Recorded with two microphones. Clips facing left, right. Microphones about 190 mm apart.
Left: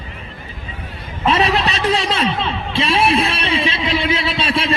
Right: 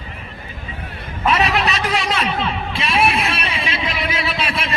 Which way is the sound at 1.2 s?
30° left (ahead or behind).